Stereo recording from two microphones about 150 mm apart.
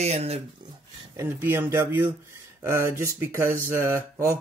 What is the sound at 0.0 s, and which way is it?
Speech, 45° right (ahead or behind).